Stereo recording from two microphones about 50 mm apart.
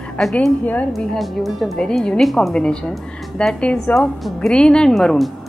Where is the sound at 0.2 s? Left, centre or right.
Centre.